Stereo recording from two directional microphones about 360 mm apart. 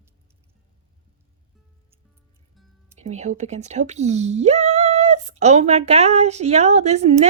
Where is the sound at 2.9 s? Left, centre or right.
Centre.